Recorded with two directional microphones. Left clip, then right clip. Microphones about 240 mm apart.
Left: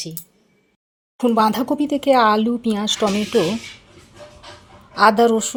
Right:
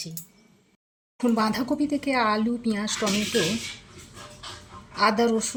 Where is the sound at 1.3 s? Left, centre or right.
Left.